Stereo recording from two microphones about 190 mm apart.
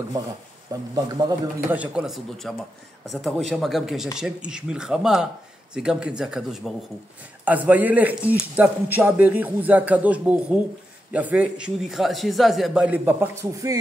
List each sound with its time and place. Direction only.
0.2 s a man's voice: 20° right (ahead or behind)
1.7 s a man's voice: 5° right (ahead or behind)